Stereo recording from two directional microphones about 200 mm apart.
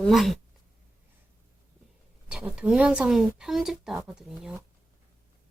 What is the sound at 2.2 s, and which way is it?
Speech, 5° right (ahead or behind).